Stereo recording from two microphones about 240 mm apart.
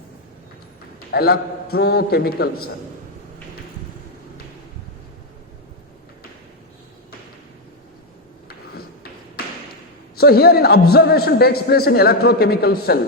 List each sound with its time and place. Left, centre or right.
1.1 s a man's voice: left
10.2 s a man's voice: left